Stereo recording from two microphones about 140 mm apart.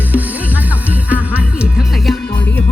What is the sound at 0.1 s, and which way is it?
Music, 10° right (ahead or behind).